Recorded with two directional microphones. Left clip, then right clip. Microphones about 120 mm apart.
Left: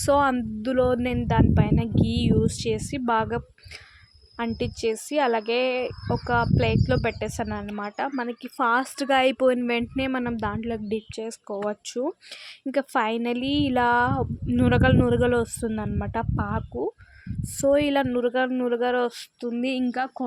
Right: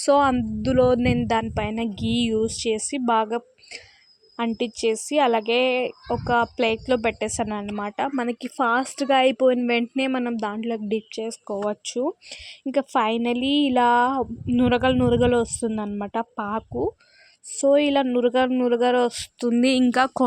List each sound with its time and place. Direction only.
0.0 s a woman's voice: 20° right (ahead or behind); by 8.6 s 35° right (ahead or behind)
8.6 s a woman's voice: 20° right (ahead or behind)
9.6 s a woman's voice: 20° right (ahead or behind)
17.6 s a woman's voice: 15° right (ahead or behind); by 19.3 s 30° right (ahead or behind)
19.4 s speech: 55° right (ahead or behind)